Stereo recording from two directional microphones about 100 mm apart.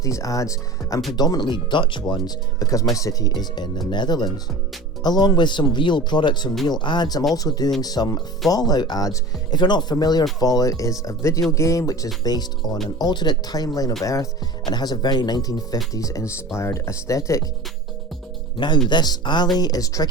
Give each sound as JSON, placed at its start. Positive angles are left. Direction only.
{"t": 0.0, "sound": "speech", "side_deg": 35}
{"t": 12.2, "sound": "speech", "side_deg": 40}
{"t": 18.5, "sound": "speech", "side_deg": 50}